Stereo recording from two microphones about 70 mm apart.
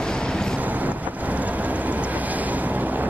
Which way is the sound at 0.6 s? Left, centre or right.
Right.